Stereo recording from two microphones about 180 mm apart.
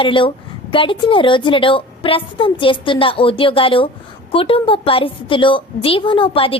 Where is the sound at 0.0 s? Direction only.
30° left (ahead or behind).